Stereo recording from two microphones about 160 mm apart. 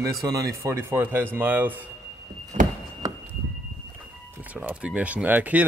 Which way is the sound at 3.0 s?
20° right (ahead or behind).